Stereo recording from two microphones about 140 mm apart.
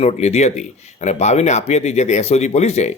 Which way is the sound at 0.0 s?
50° left (ahead or behind).